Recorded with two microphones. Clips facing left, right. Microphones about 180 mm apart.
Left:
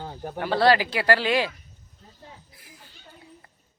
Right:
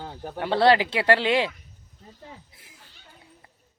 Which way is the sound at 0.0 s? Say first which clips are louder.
Left 1 dB; 10° left (ahead or behind).